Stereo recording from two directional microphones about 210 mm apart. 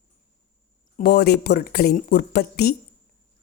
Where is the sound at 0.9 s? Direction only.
45° left (ahead or behind).